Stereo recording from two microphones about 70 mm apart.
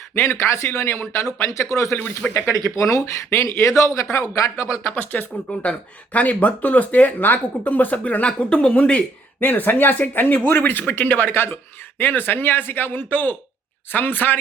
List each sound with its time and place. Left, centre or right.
0.1 s a man's voice: left
2.0 s speech: left
2.6 s speech: left
4.9 s speech: left